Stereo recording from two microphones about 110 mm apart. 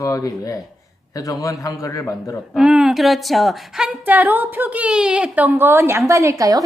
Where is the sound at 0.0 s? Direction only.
30° left (ahead or behind).